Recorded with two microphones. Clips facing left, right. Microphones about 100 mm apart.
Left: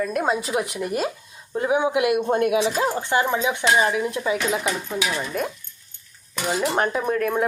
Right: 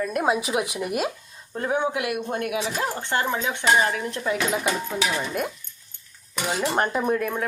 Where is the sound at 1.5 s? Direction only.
10° left (ahead or behind).